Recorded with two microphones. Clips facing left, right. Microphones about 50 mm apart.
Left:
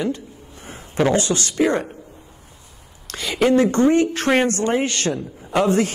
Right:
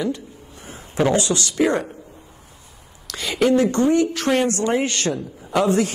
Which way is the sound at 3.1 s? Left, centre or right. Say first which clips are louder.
Even; left.